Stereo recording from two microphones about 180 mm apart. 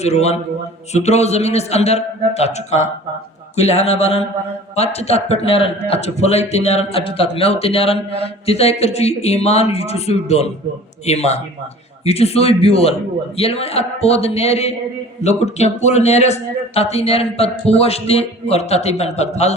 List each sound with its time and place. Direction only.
0.0 s a man's voice: 35° left (ahead or behind)